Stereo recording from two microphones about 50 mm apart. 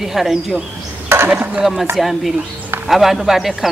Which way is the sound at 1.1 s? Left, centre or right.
Right.